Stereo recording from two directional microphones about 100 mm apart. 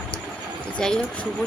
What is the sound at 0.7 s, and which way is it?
Speech, 5° left (ahead or behind).